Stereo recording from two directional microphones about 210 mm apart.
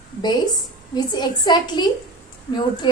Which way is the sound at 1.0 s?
20° left (ahead or behind).